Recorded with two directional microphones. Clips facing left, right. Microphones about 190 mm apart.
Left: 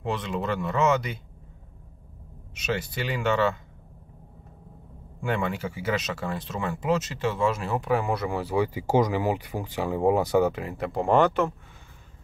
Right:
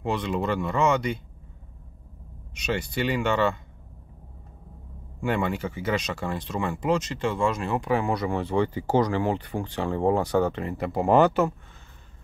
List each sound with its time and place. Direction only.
0.0 s speech: centre (ahead or behind)
2.5 s speech: centre (ahead or behind)
5.2 s speech: centre (ahead or behind)